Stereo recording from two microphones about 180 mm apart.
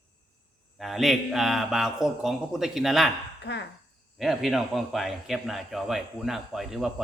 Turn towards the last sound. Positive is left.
turn(degrees=0)  # may be behind; listen again after turning